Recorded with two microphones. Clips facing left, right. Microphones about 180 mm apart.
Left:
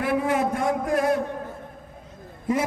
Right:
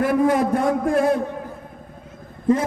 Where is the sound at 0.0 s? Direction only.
40° right (ahead or behind).